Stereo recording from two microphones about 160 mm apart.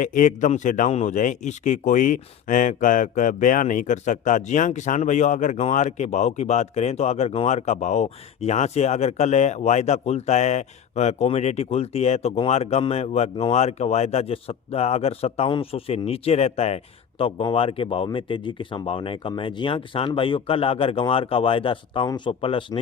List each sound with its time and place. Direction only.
0.0 s a man's voice: 55° left (ahead or behind); by 22.8 s 35° left (ahead or behind)